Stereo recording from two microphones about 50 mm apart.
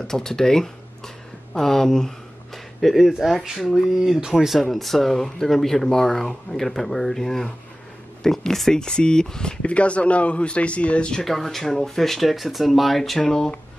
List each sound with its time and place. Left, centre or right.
0.0 s a sound: centre
3.5 s speech: centre
3.9 s speech: centre
4.6 s speech: centre
11.2 s speech: centre
13.2 s speech: centre